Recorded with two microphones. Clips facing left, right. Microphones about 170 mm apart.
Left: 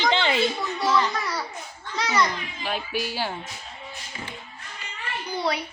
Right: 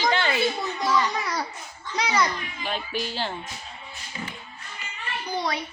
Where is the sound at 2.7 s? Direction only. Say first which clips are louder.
Left 1 dB; 10° left (ahead or behind).